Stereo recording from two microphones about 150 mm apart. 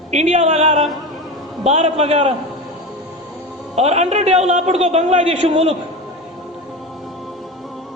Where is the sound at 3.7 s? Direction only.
45° right (ahead or behind).